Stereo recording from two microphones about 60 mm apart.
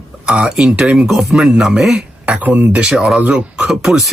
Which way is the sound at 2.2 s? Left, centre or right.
Right.